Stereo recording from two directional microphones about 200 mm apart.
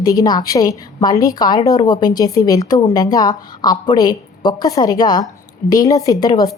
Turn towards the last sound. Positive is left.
turn(degrees=20)  # may be behind; listen again after turning